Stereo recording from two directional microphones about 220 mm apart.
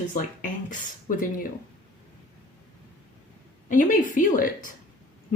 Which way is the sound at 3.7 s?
35° left (ahead or behind).